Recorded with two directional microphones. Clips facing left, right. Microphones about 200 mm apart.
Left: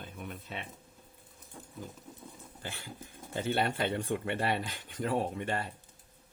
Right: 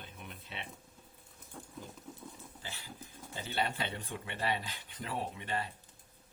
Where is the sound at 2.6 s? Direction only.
50° left (ahead or behind).